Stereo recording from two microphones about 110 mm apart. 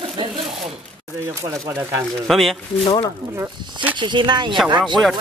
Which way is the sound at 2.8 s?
55° left (ahead or behind).